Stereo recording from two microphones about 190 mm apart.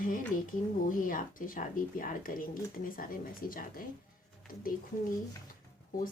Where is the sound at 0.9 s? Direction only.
45° left (ahead or behind).